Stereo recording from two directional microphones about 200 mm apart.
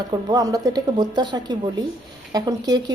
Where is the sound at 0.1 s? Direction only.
20° right (ahead or behind).